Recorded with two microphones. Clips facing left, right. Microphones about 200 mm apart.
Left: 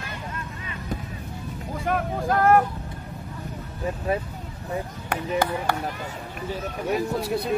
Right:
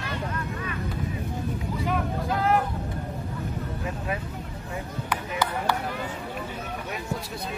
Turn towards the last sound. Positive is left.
turn(degrees=60)  # may be behind; listen again after turning